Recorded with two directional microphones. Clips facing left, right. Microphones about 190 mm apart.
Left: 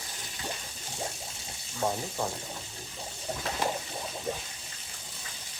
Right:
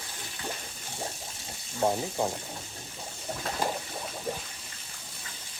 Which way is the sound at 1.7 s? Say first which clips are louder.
Right 4 dB; 20° right (ahead or behind).